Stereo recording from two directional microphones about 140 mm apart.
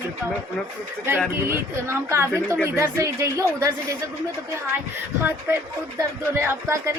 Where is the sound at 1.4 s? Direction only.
20° right (ahead or behind).